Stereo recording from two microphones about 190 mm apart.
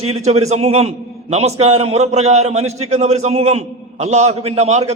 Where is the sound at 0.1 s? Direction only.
35° right (ahead or behind).